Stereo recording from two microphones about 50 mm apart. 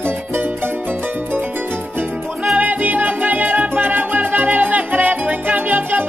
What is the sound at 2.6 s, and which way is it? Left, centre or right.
Music, right.